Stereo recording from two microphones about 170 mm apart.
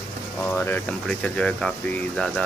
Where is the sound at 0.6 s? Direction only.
10° left (ahead or behind).